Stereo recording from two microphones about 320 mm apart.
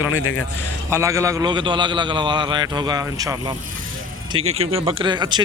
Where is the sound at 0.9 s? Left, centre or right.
Centre.